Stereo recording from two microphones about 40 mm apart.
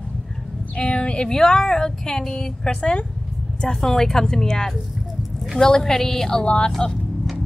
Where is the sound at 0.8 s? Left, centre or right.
Left.